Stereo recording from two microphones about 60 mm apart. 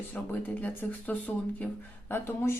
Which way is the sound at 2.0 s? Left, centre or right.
Left.